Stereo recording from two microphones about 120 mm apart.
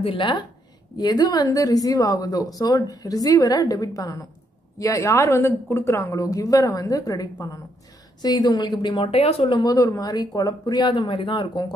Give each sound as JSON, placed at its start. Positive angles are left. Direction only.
{"t": 0.0, "sound": "speech", "side_deg": 45}
{"t": 0.9, "sound": "a woman's voice", "side_deg": 35}
{"t": 9.6, "sound": "speech", "side_deg": 30}